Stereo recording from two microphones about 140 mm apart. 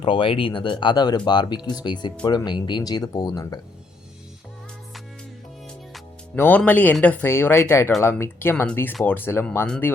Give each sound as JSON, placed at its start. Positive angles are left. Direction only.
{"t": 0.0, "sound": "speech", "side_deg": 40}
{"t": 6.3, "sound": "speech", "side_deg": 15}